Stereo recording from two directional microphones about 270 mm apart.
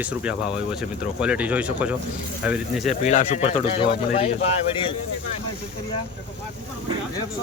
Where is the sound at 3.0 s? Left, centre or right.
Left.